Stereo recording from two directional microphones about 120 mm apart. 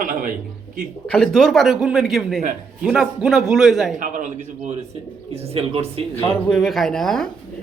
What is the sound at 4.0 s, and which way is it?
Speech, 90° right.